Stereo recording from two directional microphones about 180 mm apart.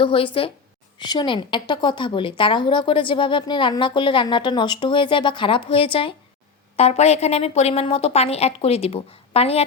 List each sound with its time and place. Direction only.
0.0 s a woman's voice: 30° left (ahead or behind)